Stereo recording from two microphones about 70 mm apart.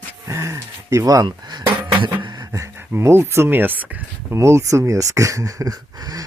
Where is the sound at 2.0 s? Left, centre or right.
Right.